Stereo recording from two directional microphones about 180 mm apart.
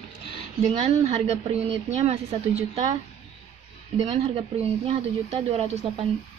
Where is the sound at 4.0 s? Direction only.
35° right (ahead or behind).